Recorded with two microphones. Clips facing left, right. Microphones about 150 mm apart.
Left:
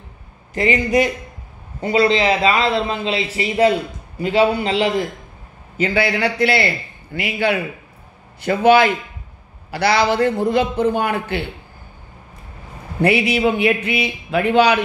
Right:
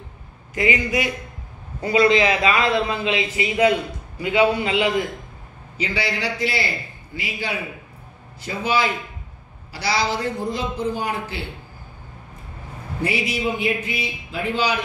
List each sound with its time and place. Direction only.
0.6 s a man's voice: 40° left (ahead or behind)
1.8 s a man's voice: 30° left (ahead or behind)
5.8 s a man's voice: 55° left (ahead or behind)
13.0 s a man's voice: 65° left (ahead or behind)